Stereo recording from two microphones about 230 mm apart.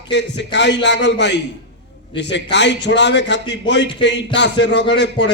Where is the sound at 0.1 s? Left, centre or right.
Left.